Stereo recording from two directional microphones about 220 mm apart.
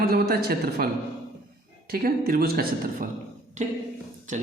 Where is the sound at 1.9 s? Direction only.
45° right (ahead or behind).